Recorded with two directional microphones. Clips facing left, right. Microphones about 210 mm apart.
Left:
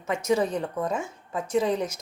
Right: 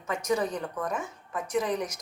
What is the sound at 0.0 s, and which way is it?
Speech, 25° left (ahead or behind).